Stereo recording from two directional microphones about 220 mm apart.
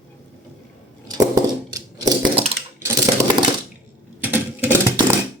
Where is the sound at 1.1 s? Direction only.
15° right (ahead or behind).